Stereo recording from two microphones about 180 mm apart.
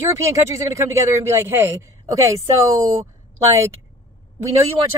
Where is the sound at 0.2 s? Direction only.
15° right (ahead or behind).